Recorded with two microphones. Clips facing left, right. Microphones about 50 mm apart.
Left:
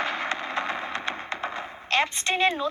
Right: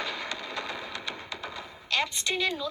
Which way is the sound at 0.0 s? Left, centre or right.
Left.